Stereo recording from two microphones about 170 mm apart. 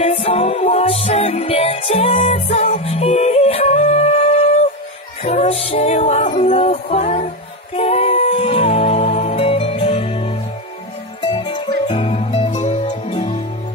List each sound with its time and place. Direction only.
0.0 s music: 40° left (ahead or behind)
12.5 s music: 45° left (ahead or behind)